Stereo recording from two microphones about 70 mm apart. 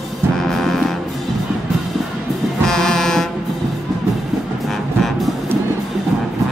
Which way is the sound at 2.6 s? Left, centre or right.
Centre.